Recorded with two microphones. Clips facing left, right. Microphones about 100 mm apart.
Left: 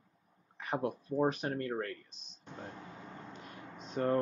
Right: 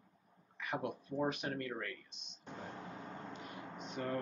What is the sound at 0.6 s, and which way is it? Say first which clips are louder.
Speech: left 5 dB; 35° left (ahead or behind).